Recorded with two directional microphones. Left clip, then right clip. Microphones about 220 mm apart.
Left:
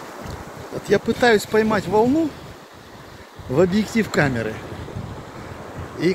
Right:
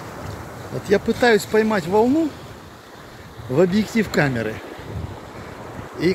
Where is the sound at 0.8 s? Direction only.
Centre (ahead or behind).